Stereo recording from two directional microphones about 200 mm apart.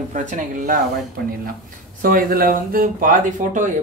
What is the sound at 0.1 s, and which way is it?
Speech, 40° right (ahead or behind).